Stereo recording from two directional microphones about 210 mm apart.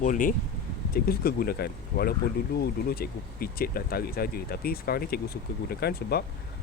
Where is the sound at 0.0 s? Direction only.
40° left (ahead or behind).